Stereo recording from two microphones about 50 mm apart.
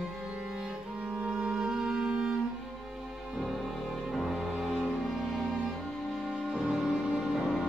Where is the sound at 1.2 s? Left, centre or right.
Centre.